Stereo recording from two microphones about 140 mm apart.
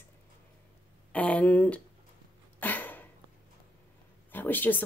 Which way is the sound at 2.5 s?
15° left (ahead or behind).